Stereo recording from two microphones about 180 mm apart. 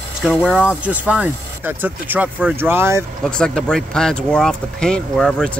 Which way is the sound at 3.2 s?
5° left (ahead or behind).